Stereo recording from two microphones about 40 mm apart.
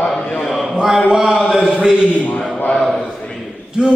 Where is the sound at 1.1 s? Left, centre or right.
Centre.